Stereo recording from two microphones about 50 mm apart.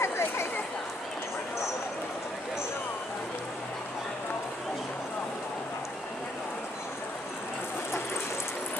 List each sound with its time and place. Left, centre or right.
0.0 s chatter: left